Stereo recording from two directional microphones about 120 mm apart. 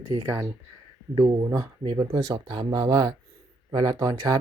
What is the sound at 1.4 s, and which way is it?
Speech, 25° right (ahead or behind).